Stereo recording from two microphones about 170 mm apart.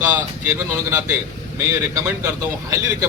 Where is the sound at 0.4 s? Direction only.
15° right (ahead or behind).